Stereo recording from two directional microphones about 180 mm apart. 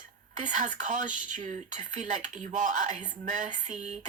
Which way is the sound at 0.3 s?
45° right (ahead or behind).